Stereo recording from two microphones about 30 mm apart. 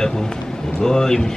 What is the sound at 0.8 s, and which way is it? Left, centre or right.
Speech, centre.